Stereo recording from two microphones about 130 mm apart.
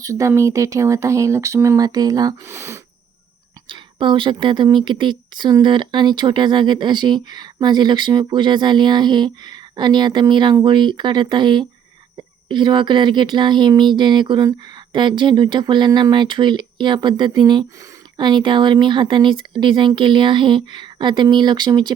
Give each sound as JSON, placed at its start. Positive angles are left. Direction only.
{"t": 0.0, "sound": "speech", "side_deg": -25}
{"t": 3.7, "sound": "speech", "side_deg": -40}